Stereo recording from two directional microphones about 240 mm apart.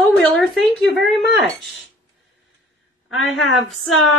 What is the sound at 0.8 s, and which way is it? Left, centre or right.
Speech, centre.